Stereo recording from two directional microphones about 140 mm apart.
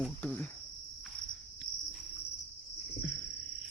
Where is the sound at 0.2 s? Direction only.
10° left (ahead or behind).